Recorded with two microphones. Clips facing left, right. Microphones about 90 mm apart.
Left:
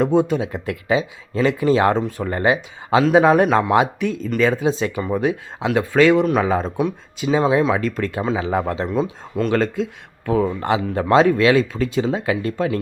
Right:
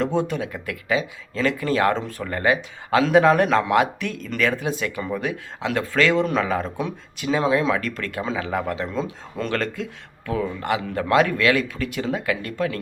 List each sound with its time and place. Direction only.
0.0 s speech: 15° left (ahead or behind)
8.9 s speech: 10° left (ahead or behind)
9.6 s speech: 20° left (ahead or behind)